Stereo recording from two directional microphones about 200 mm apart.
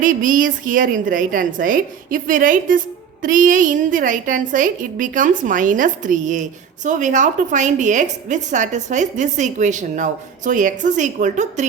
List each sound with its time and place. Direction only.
0.0 s a woman's voice: 40° right (ahead or behind)